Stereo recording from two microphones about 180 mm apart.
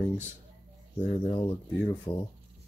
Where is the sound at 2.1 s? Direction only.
25° left (ahead or behind).